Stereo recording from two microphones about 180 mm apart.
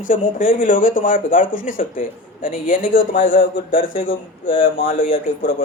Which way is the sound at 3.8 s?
90° left.